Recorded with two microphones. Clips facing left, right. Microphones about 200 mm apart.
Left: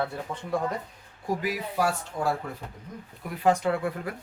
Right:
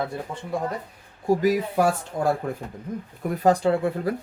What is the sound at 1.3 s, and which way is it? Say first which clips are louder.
Speech: right 9 dB; 40° right (ahead or behind).